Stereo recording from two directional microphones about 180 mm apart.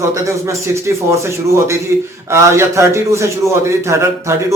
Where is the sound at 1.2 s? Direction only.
15° right (ahead or behind).